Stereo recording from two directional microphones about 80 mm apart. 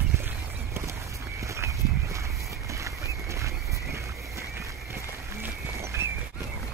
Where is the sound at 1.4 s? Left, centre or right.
Right.